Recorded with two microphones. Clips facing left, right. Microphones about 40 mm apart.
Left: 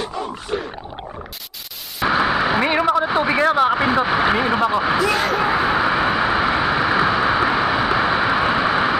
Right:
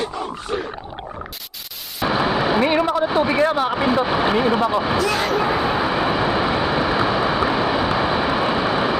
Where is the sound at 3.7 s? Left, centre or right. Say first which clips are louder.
Left 1 dB; left.